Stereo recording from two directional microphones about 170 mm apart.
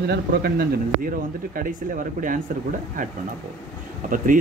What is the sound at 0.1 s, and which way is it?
Speech, 65° right (ahead or behind).